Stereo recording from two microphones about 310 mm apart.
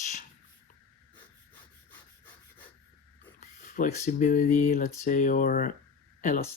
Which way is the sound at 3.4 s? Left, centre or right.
Left.